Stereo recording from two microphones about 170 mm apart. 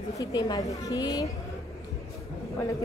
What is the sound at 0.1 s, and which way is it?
A woman's voice, 25° left (ahead or behind).